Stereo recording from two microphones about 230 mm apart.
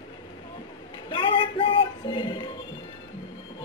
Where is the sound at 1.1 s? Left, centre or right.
Left.